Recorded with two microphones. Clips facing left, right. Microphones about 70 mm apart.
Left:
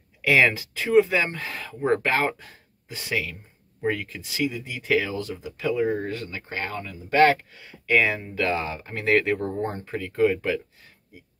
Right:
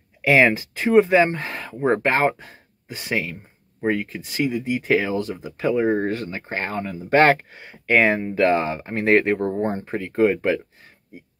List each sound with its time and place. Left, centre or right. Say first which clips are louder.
0.2 s speech: right 4 dB; right
1.7 s speech: right 3 dB; right
5.2 s speech: right 4 dB; right